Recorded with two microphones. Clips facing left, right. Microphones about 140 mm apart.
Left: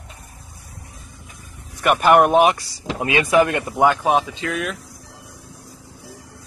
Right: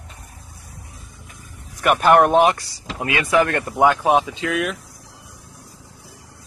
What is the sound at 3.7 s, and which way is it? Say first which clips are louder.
Speech: right 1 dB; centre (ahead or behind).